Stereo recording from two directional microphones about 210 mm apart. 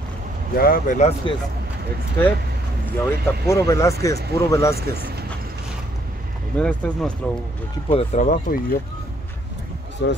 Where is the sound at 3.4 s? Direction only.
15° left (ahead or behind).